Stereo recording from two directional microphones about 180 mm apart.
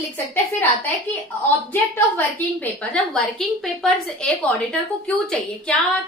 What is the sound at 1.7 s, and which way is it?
A woman's voice, 10° left (ahead or behind).